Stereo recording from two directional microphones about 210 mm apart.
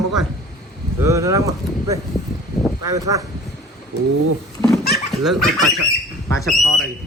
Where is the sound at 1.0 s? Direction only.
15° right (ahead or behind).